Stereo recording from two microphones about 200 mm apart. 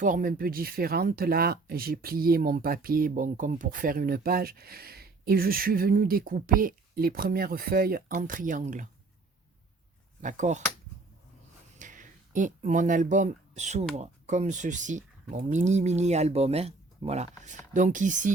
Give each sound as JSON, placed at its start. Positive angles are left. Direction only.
{"t": 0.0, "sound": "speech", "side_deg": -40}
{"t": 10.2, "sound": "speech", "side_deg": -35}
{"t": 11.8, "sound": "speech", "side_deg": -40}